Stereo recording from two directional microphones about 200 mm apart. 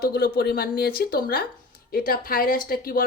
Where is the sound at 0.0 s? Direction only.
50° left (ahead or behind).